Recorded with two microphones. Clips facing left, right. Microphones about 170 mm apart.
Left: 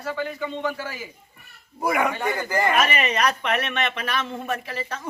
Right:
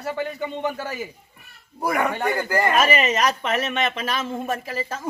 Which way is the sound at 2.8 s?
40° right (ahead or behind).